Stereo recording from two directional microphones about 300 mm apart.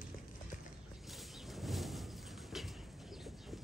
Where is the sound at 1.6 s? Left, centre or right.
Centre.